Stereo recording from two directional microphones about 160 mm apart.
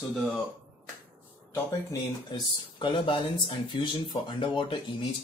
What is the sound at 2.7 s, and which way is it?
Speech, 30° left (ahead or behind).